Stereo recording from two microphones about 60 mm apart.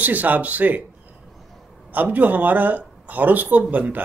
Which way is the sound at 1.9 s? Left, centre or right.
Right.